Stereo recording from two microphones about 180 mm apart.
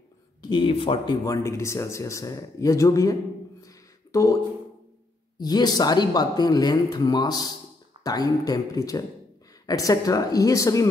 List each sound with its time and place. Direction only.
0.4 s speech: 25° left (ahead or behind)
3.6 s a sound: 20° left (ahead or behind)
5.4 s speech: 20° left (ahead or behind)